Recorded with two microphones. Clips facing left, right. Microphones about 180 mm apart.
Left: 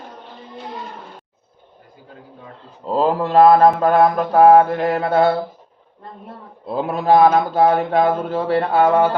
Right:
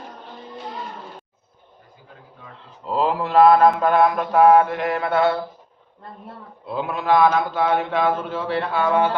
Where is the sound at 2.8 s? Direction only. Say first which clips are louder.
Left 4 dB; 40° left (ahead or behind).